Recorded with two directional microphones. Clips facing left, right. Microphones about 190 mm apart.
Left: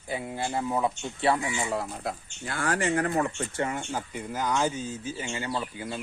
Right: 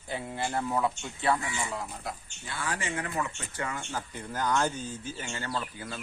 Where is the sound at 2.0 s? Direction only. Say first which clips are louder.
Left 5 dB; 65° left (ahead or behind).